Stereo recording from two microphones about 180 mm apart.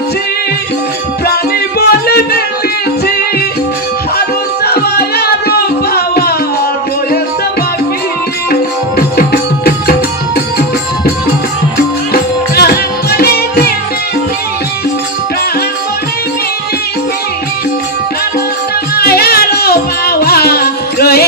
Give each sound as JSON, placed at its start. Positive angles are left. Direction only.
{"t": 1.8, "sound": "music", "side_deg": 60}
{"t": 4.6, "sound": "music", "side_deg": 60}
{"t": 8.5, "sound": "music", "side_deg": 60}
{"t": 12.1, "sound": "music", "side_deg": 60}
{"t": 18.9, "sound": "music", "side_deg": 60}